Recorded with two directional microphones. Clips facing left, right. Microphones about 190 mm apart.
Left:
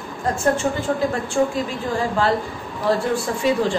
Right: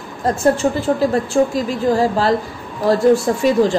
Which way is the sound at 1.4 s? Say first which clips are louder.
Right 2 dB; 40° right (ahead or behind).